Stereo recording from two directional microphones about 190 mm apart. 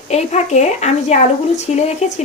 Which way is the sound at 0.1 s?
35° left (ahead or behind).